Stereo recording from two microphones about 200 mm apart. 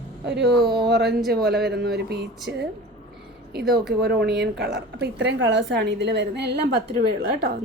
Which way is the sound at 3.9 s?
55° right (ahead or behind).